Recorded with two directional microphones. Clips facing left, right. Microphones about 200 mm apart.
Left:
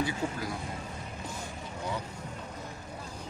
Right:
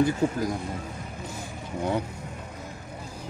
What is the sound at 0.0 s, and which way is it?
Speech, 45° right (ahead or behind).